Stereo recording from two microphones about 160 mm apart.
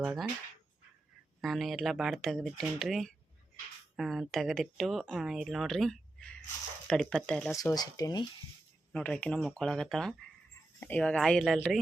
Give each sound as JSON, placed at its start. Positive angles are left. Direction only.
{"t": 0.0, "sound": "speech", "side_deg": -5}
{"t": 1.4, "sound": "speech", "side_deg": 0}
{"t": 7.5, "sound": "speech", "side_deg": 25}
{"t": 8.9, "sound": "speech", "side_deg": 5}